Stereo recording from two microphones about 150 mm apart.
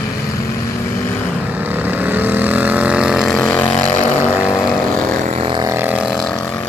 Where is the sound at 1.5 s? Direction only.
10° right (ahead or behind); by 3.6 s 5° left (ahead or behind).